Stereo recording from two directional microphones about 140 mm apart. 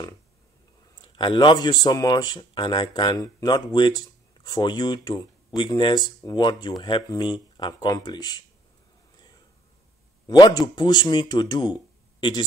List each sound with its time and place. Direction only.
1.1 s speech: 35° left (ahead or behind)
10.2 s speech: 25° left (ahead or behind)